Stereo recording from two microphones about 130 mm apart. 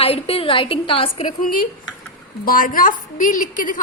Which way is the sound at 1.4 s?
90° left.